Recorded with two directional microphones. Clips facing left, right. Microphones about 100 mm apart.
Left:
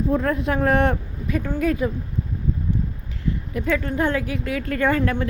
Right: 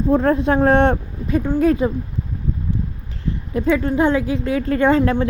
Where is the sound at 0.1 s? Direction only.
30° right (ahead or behind).